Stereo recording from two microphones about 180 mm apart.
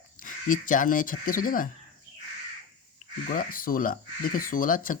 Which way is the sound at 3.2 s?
50° left (ahead or behind).